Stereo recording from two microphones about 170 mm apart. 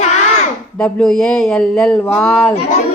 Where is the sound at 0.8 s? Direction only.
5° left (ahead or behind).